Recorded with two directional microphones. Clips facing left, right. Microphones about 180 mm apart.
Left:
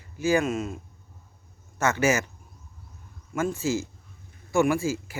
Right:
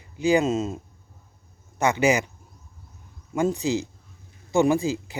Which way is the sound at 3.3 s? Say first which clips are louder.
Right 3 dB; 20° right (ahead or behind).